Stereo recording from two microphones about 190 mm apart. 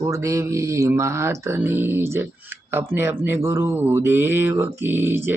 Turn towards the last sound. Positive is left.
turn(degrees=-10)  # may be behind; listen again after turning